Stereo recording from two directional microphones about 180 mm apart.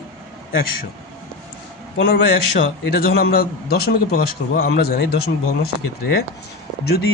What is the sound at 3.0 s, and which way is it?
A man's voice, 60° left (ahead or behind).